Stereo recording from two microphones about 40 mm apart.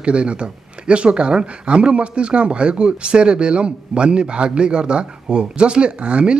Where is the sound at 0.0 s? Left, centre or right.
Right.